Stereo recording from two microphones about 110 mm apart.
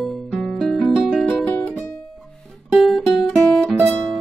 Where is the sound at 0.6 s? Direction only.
Centre (ahead or behind).